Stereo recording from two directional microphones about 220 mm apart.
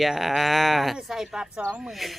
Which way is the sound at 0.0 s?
Centre (ahead or behind).